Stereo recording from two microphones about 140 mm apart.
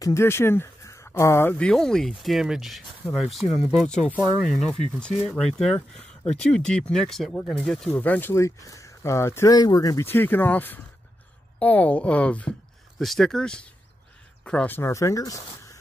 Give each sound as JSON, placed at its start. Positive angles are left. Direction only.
{"t": 0.0, "sound": "speech", "side_deg": 20}
{"t": 1.7, "sound": "speech", "side_deg": 5}
{"t": 14.8, "sound": "speech", "side_deg": 20}